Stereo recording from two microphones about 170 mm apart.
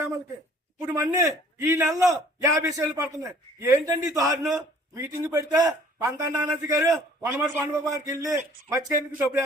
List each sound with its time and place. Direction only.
0.8 s a man's voice: 20° right (ahead or behind)